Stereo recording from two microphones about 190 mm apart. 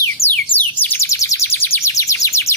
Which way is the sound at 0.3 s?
10° left (ahead or behind).